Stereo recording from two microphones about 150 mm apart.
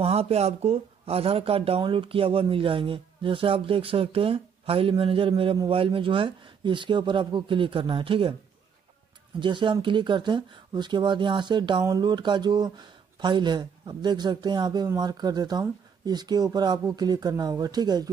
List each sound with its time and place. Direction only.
0.0 s speech: 40° right (ahead or behind)
9.4 s speech: 35° right (ahead or behind)